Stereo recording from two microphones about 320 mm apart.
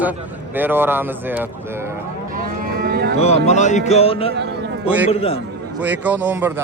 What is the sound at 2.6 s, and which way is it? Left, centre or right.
Moo, right.